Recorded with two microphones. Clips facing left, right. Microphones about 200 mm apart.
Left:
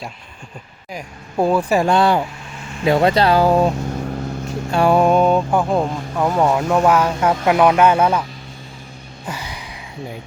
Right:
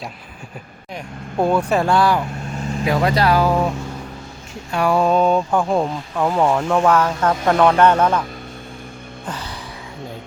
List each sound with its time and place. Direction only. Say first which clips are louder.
0.9 s speech: left 1 dB; 5° left (ahead or behind)
1.9 s speech: left 1 dB; 25° left (ahead or behind)
4.7 s speech: left 3 dB; 25° left (ahead or behind)
5.0 s speech: left 2 dB; 10° left (ahead or behind)
6.3 s speech: left 1 dB; 5° left (ahead or behind)
9.2 s a sound: left 1 dB; 10° left (ahead or behind)